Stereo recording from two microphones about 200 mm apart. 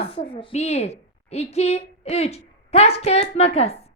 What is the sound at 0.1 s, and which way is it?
A woman's voice, 25° left (ahead or behind).